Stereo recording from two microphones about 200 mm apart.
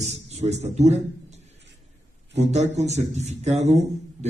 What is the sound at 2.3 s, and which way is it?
Speech, 35° right (ahead or behind).